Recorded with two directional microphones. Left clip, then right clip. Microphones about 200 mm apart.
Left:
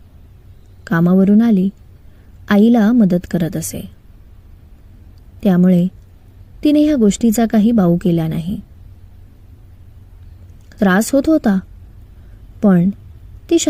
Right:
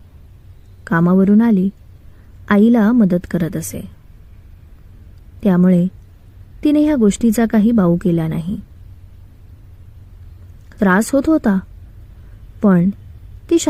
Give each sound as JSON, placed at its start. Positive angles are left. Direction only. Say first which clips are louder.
{"t": 0.9, "sound": "a woman's voice", "louder": "even", "side_deg": 20}
{"t": 5.4, "sound": "a woman's voice", "louder": "even", "side_deg": 20}
{"t": 10.7, "sound": "a woman's voice", "louder": "even", "side_deg": 20}